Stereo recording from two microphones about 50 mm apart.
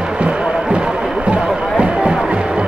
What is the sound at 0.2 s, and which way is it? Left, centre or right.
Music, right.